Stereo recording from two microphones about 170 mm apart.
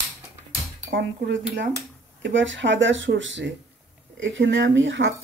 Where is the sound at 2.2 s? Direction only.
90° right.